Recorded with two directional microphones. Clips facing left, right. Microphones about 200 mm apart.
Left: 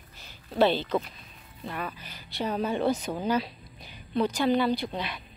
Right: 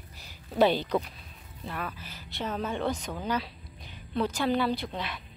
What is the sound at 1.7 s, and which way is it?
Speech, centre (ahead or behind).